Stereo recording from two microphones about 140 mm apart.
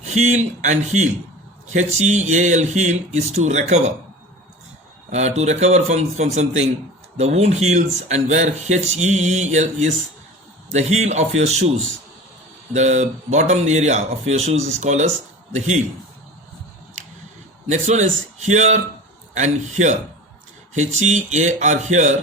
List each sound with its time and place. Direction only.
0.0 s speech: 55° right (ahead or behind)
5.1 s a man's voice: 50° right (ahead or behind)
12.7 s speech: 55° right (ahead or behind)
17.7 s speech: 60° right (ahead or behind)